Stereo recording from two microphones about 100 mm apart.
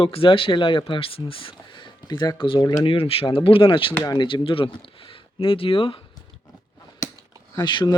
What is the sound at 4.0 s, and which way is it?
Speech, 35° left (ahead or behind).